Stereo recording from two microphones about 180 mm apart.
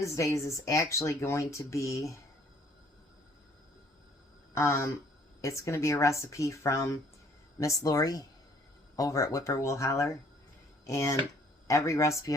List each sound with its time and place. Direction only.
0.0 s speech: 15° left (ahead or behind)
4.5 s speech: 15° left (ahead or behind)